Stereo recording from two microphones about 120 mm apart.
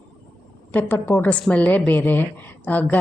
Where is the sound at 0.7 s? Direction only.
15° left (ahead or behind).